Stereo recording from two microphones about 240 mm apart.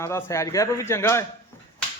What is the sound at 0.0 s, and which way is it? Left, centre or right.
A man's voice, centre.